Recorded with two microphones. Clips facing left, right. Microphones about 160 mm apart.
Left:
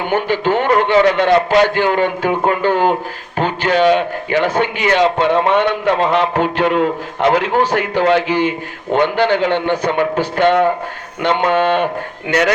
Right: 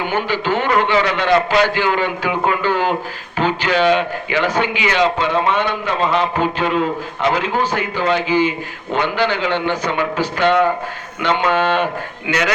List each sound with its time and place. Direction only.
0.1 s a man's voice: 55° left (ahead or behind)